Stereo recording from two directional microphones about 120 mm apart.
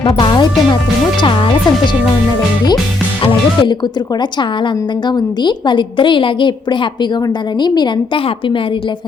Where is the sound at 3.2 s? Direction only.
45° left (ahead or behind).